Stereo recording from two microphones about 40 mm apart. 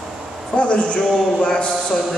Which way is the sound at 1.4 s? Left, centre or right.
Left.